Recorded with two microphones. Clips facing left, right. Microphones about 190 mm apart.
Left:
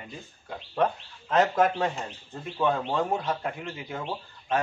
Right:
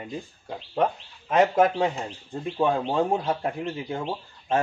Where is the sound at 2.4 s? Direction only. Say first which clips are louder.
Right 3 dB; 30° right (ahead or behind).